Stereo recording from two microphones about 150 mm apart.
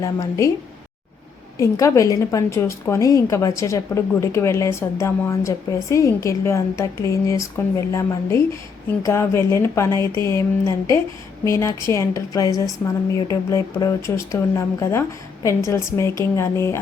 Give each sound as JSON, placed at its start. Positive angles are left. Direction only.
{"t": 0.0, "sound": "a woman's voice", "side_deg": 20}
{"t": 1.5, "sound": "a woman's voice", "side_deg": 20}